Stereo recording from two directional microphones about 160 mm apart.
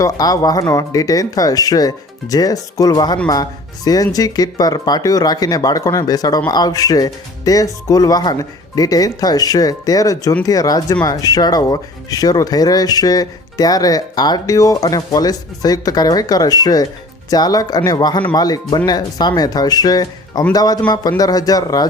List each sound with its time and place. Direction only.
0.0 s speech: 25° left (ahead or behind)